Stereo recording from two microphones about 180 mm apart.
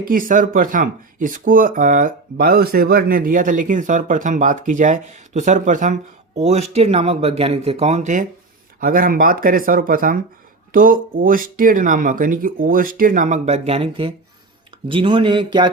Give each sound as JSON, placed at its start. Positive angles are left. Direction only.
{"t": 0.1, "sound": "speech", "side_deg": -50}